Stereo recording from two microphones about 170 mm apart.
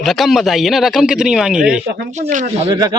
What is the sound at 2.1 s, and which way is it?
Speech, 45° right (ahead or behind).